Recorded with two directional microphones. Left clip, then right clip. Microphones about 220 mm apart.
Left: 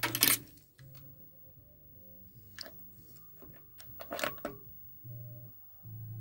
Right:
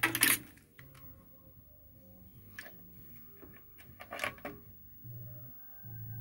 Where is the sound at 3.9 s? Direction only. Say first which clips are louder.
Left 2 dB; 40° left (ahead or behind).